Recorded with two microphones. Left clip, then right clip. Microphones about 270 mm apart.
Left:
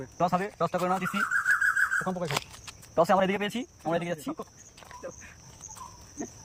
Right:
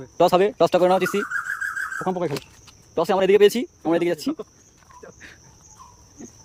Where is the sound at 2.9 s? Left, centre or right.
Centre.